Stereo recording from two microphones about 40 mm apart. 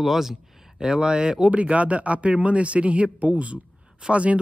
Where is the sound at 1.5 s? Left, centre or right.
Right.